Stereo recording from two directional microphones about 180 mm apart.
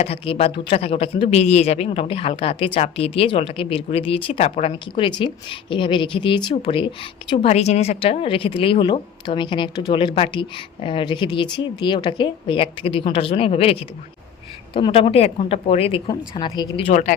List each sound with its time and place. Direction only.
0.0 s speech: 35° left (ahead or behind)
16.9 s speech: 45° left (ahead or behind)